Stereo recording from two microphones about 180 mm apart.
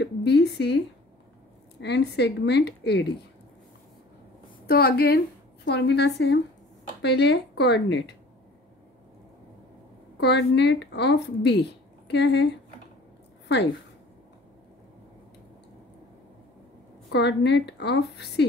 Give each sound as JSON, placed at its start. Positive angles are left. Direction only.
{"t": 0.0, "sound": "a sound", "side_deg": 75}
{"t": 1.8, "sound": "speech", "side_deg": 70}
{"t": 4.6, "sound": "a woman's voice", "side_deg": 60}
{"t": 10.2, "sound": "speech", "side_deg": 70}
{"t": 17.1, "sound": "speech", "side_deg": 75}